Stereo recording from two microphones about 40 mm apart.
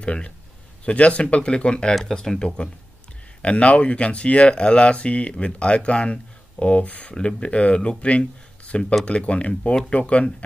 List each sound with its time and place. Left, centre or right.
0.0 s speech: left